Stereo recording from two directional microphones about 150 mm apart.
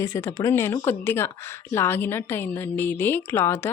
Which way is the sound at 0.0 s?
20° left (ahead or behind).